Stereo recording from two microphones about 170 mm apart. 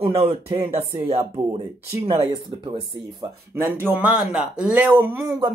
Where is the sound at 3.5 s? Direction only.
10° right (ahead or behind).